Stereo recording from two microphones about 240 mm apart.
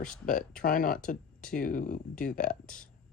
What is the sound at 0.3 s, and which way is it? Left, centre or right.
Speech, left.